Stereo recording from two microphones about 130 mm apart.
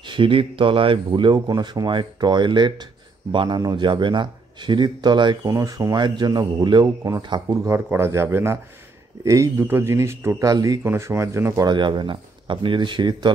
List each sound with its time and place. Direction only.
0.0 s speech: 40° right (ahead or behind)
5.5 s speech: 25° right (ahead or behind)